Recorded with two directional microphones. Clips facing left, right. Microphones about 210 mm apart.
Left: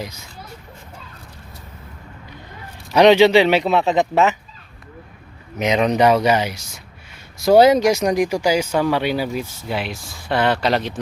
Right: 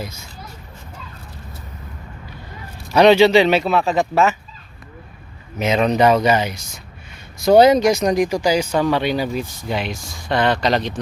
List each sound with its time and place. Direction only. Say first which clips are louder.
2.9 s speech: even; 15° left (ahead or behind)
5.5 s speech: even; 15° left (ahead or behind)